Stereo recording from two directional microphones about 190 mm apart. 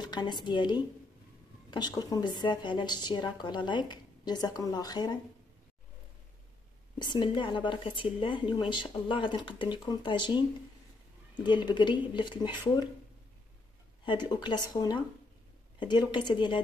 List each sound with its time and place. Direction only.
0.0 s a woman's voice: 25° left (ahead or behind)
7.0 s a woman's voice: 25° left (ahead or behind)
11.4 s a woman's voice: 25° left (ahead or behind)
14.0 s a woman's voice: 25° left (ahead or behind)